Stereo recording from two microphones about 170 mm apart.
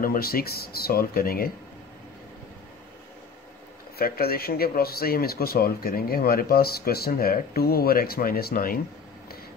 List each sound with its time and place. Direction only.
0.0 s speech: 60° left (ahead or behind)
4.0 s speech: 60° left (ahead or behind)